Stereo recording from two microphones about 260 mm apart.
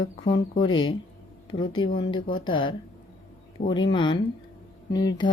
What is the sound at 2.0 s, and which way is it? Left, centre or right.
Speech, centre.